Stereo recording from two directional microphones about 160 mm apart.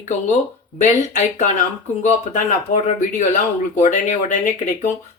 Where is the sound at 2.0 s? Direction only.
50° left (ahead or behind).